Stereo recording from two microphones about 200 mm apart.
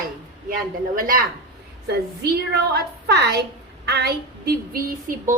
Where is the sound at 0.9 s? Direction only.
45° right (ahead or behind).